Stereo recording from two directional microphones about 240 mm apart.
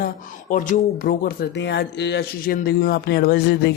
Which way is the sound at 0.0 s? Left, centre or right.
Left.